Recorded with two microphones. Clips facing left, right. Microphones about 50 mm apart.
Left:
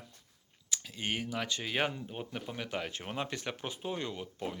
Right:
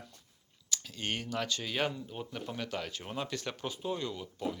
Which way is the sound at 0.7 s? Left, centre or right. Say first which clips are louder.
Even; left.